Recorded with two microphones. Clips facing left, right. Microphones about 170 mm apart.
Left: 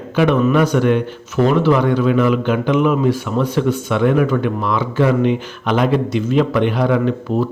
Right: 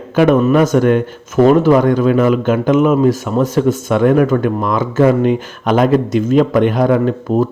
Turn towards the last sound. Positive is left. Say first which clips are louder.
# right 3 dB
turn(degrees=-45)  # may be behind; listen again after turning